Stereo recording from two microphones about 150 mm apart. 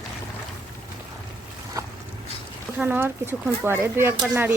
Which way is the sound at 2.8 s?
15° right (ahead or behind).